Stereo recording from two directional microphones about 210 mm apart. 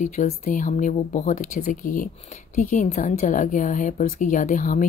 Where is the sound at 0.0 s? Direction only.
35° left (ahead or behind).